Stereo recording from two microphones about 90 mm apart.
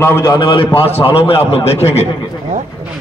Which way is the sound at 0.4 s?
65° left (ahead or behind).